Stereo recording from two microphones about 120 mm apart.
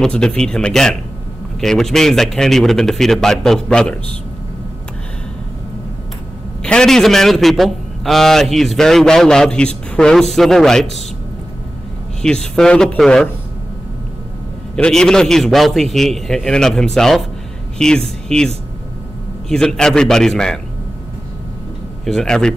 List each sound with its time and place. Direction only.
0.0 s a man's voice: 5° left (ahead or behind)
6.6 s a man's voice: 5° left (ahead or behind)
12.2 s a man's voice: 5° left (ahead or behind)
14.8 s a man's voice: 5° left (ahead or behind)
19.5 s a man's voice: 5° left (ahead or behind)
22.0 s a man's voice: 5° left (ahead or behind)